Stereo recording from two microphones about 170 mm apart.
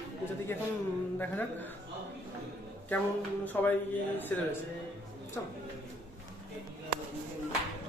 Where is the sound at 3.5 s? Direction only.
10° left (ahead or behind).